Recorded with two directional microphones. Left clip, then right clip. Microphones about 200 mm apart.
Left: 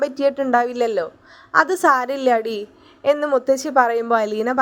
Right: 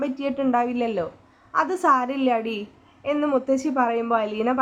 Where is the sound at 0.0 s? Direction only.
30° left (ahead or behind).